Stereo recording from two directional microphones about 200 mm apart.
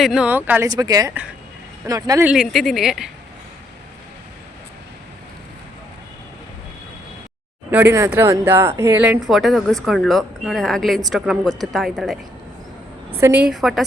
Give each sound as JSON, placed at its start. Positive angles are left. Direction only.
{"t": 0.0, "sound": "speech", "side_deg": -5}
{"t": 2.3, "sound": "speech", "side_deg": 0}
{"t": 7.7, "sound": "speech", "side_deg": -10}